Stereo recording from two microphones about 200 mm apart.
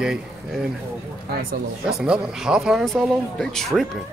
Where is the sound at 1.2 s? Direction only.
50° right (ahead or behind).